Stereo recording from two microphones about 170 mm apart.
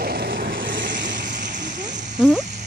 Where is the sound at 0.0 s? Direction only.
70° right (ahead or behind); by 1.2 s 90° right.